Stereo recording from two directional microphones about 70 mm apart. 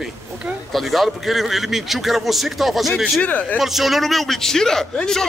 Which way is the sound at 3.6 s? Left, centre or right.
Centre.